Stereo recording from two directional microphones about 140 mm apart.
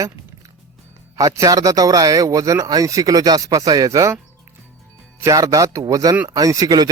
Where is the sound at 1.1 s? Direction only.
25° right (ahead or behind).